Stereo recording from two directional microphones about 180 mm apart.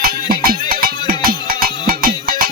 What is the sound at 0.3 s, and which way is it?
Music, 55° right (ahead or behind).